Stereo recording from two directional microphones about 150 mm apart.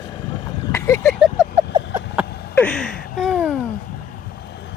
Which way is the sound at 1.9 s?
10° right (ahead or behind).